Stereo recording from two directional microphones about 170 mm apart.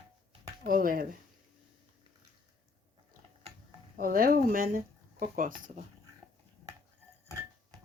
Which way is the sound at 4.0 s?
60° right (ahead or behind).